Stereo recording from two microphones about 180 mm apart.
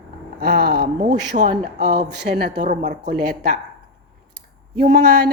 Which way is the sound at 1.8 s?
70° right (ahead or behind).